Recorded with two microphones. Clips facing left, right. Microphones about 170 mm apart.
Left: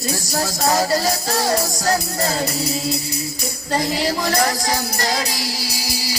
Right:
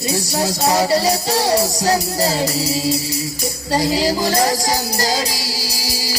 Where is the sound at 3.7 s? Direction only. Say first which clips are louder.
Right 3 dB; 30° right (ahead or behind).